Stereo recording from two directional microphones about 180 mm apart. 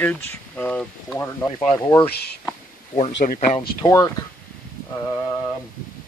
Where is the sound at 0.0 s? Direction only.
10° left (ahead or behind).